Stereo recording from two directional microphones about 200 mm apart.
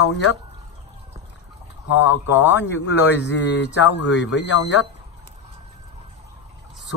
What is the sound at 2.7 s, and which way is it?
Speech, 60° left (ahead or behind).